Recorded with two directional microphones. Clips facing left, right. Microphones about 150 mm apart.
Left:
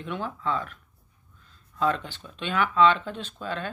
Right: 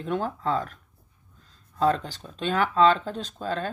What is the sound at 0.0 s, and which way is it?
Speech, 40° right (ahead or behind).